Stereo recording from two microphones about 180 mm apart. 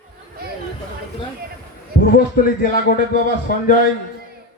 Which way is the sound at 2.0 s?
55° left (ahead or behind).